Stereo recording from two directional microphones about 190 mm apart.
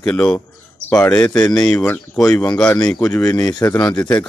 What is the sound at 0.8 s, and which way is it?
Speech, 15° left (ahead or behind).